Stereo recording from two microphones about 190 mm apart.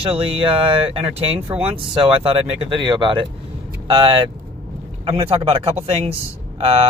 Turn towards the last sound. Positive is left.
turn(degrees=-30)  # may be behind; listen again after turning